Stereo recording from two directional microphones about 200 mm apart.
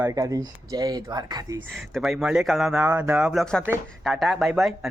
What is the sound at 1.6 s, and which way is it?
Speech, centre (ahead or behind).